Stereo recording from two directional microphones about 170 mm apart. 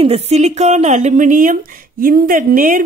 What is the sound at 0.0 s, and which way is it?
Speech, 40° right (ahead or behind).